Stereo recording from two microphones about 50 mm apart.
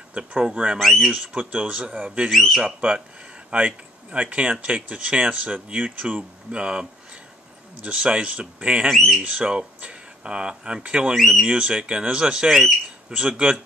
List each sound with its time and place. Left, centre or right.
0.1 s speech: right
0.7 s speech: centre
1.1 s speech: right
2.3 s speech: centre
2.6 s speech: right
8.9 s speech: centre
9.2 s speech: right
11.1 s speech: centre
11.4 s speech: right